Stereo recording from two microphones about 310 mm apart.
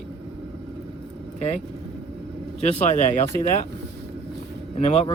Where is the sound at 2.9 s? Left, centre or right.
Left.